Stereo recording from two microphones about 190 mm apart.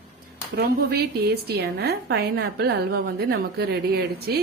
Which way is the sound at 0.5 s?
60° right (ahead or behind).